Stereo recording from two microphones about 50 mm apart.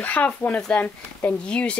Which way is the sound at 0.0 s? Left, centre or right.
Left.